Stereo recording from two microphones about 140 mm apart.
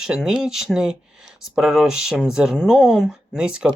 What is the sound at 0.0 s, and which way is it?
Speech, 5° right (ahead or behind).